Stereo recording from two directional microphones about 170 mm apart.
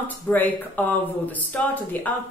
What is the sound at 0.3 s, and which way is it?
A woman's voice, 10° left (ahead or behind).